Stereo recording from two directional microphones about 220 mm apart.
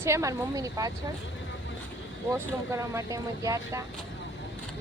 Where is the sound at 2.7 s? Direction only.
15° right (ahead or behind).